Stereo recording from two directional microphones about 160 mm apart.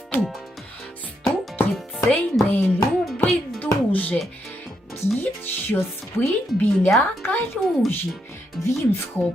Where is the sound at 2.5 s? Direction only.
10° left (ahead or behind).